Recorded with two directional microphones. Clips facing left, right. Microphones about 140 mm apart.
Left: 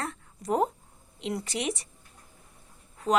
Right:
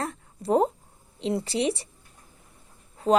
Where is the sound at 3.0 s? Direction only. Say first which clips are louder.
Right 5 dB; 30° right (ahead or behind).